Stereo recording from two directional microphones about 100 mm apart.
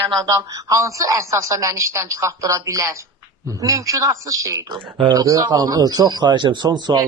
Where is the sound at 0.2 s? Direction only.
35° right (ahead or behind).